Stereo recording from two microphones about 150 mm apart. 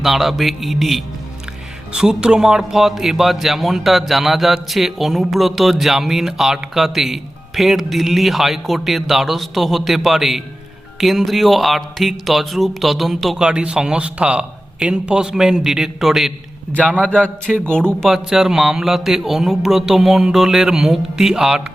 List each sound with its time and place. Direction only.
0.0 s speech: centre (ahead or behind)
17.4 s speech: 5° left (ahead or behind)